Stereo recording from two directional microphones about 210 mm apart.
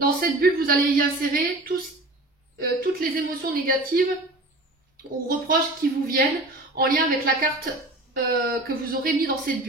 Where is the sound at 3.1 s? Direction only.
45° right (ahead or behind).